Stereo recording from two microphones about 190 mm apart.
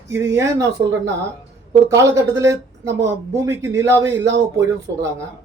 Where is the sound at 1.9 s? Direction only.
15° right (ahead or behind).